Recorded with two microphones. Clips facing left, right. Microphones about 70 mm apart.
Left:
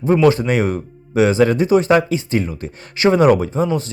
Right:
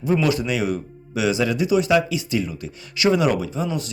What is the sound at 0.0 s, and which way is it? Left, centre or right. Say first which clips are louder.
Speech: left 7 dB; left.